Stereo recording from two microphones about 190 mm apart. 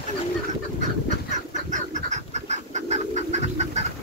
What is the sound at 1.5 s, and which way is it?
Chicken, 40° right (ahead or behind).